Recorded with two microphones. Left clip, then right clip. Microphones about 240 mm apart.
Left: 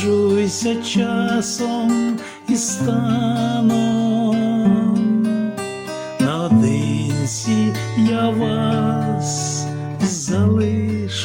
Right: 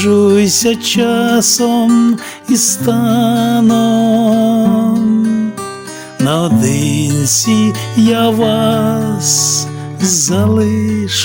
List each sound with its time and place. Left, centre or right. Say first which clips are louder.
0.0 s music: right 7 dB; right
6.2 s music: right 6 dB; right